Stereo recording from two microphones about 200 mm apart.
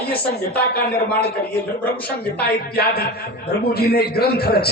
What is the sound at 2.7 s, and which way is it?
A man's voice, 50° left (ahead or behind).